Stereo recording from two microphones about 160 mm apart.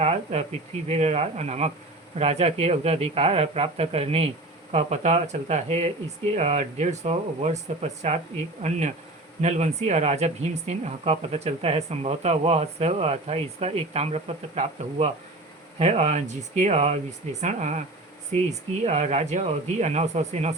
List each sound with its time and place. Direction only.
0.0 s speech: 40° right (ahead or behind)
9.4 s speech: 45° right (ahead or behind)
18.9 s speech: 45° right (ahead or behind)